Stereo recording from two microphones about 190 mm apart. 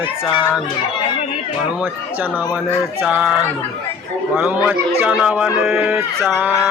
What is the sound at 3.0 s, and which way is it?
Speech, 5° right (ahead or behind).